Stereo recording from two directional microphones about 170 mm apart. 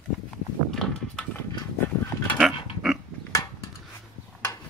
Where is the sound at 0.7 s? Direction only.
5° left (ahead or behind).